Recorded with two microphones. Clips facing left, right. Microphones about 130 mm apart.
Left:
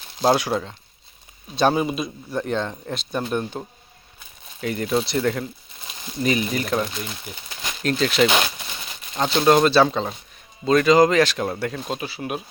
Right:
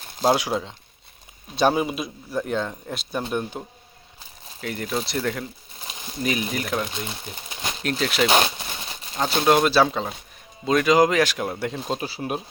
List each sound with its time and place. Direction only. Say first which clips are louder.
0.2 s a man's voice: left 2 dB; 15° right (ahead or behind)
4.6 s speech: left 5 dB; centre (ahead or behind)
8.3 s a sound: right 2 dB; 30° right (ahead or behind)
9.2 s a man's voice: left 2 dB; 5° right (ahead or behind)
11.9 s speech: right 1 dB; 35° right (ahead or behind)